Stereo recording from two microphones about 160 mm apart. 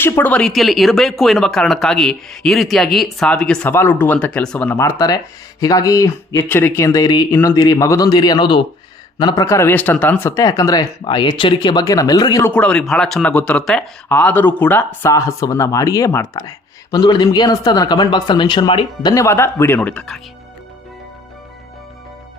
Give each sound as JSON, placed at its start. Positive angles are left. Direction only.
{"t": 0.0, "sound": "speech", "side_deg": 10}
{"t": 19.1, "sound": "speech", "side_deg": 15}